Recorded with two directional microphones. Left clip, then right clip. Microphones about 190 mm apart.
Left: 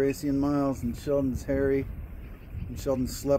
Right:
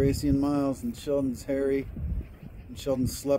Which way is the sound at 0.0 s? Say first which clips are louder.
Right 1 dB; 20° right (ahead or behind).